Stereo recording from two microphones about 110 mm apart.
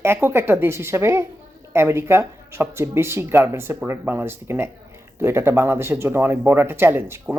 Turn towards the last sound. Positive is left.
turn(degrees=-20)  # may be behind; listen again after turning